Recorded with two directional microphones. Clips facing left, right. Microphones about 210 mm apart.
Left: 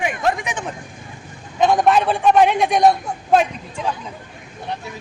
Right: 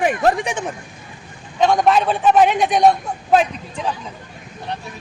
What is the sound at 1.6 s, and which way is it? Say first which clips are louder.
A man's voice: even; 5° left (ahead or behind).